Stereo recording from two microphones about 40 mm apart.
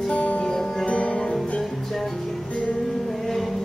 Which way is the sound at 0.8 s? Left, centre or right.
Left.